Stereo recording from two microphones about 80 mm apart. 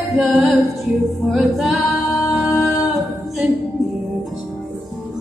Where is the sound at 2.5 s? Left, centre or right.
Left.